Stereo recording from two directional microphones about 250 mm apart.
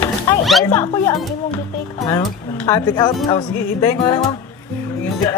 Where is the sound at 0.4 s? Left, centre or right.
Centre.